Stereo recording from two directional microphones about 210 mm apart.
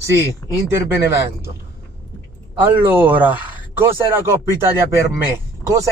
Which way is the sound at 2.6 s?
10° right (ahead or behind).